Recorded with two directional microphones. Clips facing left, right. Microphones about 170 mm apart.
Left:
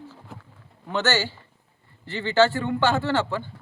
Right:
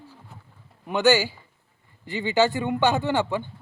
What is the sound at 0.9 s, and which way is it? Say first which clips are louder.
Speech: right 5 dB; 15° right (ahead or behind).